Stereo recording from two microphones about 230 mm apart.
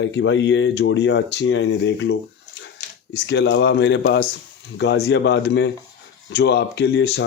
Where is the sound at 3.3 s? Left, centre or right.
Left.